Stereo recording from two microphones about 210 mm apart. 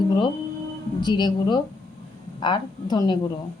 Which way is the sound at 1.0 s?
20° left (ahead or behind).